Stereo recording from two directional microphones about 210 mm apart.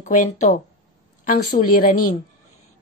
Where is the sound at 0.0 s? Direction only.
35° left (ahead or behind).